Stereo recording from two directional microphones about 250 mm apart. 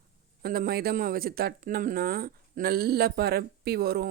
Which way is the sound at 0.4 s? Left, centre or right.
Right.